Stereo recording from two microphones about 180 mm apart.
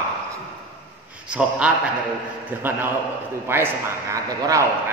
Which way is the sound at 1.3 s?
5° right (ahead or behind).